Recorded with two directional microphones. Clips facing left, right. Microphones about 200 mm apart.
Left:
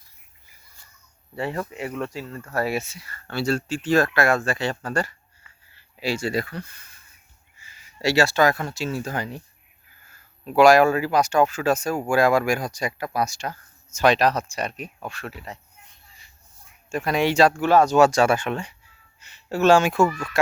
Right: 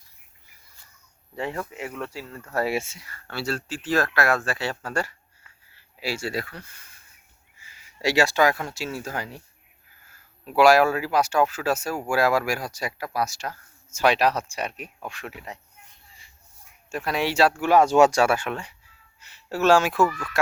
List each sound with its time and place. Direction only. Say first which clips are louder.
1.9 s speech: left 4 dB; 15° left (ahead or behind)
2.1 s speech: left 4 dB; 10° right (ahead or behind)
2.5 s speech: even; 25° right (ahead or behind)
3.1 s speech: left 7 dB; 5° right (ahead or behind)
16.9 s speech: left 4 dB; centre (ahead or behind)
17.8 s speech: right 1 dB; 25° right (ahead or behind)
18.1 s speech: left 2 dB; 10° right (ahead or behind)
20.0 s speech: left 2 dB; 25° left (ahead or behind)